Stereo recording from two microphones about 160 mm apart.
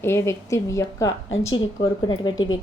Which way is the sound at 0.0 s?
15° left (ahead or behind).